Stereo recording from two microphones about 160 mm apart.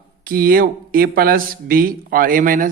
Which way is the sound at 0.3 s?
65° right (ahead or behind).